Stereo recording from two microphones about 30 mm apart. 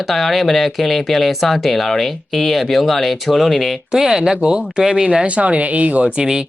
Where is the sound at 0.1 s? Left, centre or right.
Centre.